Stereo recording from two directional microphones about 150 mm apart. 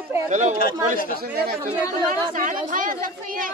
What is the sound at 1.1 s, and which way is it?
Speech, 90° right.